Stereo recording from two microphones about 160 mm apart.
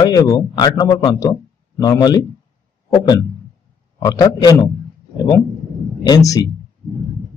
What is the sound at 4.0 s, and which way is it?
Speech, 25° left (ahead or behind).